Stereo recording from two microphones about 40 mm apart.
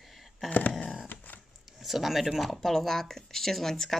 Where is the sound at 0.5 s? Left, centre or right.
Left.